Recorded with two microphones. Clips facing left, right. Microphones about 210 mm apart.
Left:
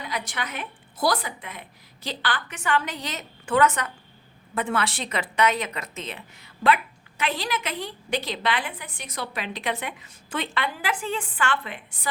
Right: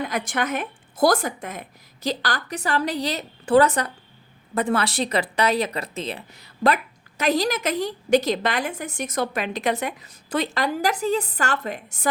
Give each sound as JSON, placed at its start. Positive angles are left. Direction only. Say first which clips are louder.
{"t": 0.0, "sound": "a woman's voice", "louder": "right 7 dB", "side_deg": -50}